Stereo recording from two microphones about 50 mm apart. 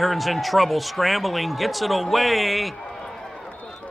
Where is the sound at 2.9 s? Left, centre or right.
Centre.